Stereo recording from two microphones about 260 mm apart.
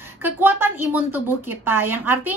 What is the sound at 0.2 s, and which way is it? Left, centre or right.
A woman's voice, centre.